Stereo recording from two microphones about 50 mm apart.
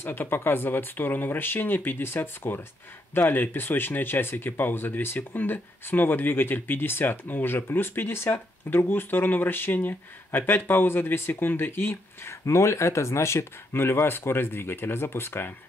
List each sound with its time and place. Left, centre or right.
0.0 s speech: left
12.4 s speech: left